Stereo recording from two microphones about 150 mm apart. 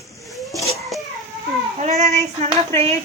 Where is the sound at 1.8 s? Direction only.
50° right (ahead or behind).